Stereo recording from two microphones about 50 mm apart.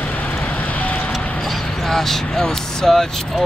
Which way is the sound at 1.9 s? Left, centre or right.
Centre.